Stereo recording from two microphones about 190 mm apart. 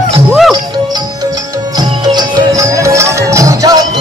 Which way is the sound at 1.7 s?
20° right (ahead or behind).